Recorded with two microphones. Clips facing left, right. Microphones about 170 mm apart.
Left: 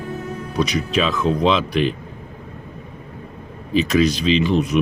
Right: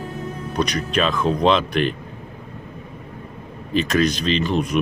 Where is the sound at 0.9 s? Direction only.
50° right (ahead or behind).